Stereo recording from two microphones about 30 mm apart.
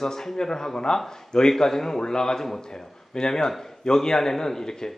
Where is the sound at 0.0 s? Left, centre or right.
Centre.